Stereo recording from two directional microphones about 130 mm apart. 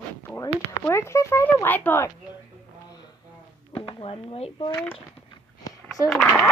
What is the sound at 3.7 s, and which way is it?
Speech, 45° left (ahead or behind).